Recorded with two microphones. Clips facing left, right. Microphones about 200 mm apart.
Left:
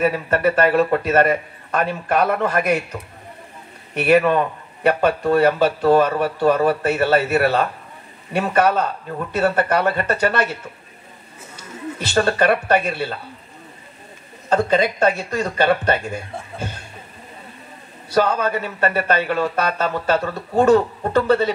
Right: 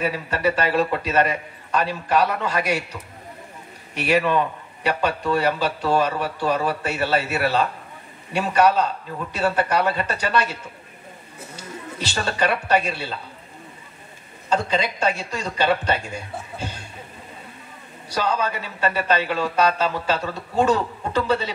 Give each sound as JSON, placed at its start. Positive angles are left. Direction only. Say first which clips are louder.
{"t": 0.0, "sound": "speech", "louder": "left 5 dB", "side_deg": 55}
{"t": 11.5, "sound": "speech", "louder": "left 5 dB", "side_deg": 55}
{"t": 14.5, "sound": "speech", "louder": "left 5 dB", "side_deg": 55}
{"t": 18.1, "sound": "speech", "louder": "left 5 dB", "side_deg": 55}